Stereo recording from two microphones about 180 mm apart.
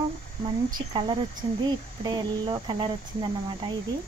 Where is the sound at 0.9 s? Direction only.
30° right (ahead or behind).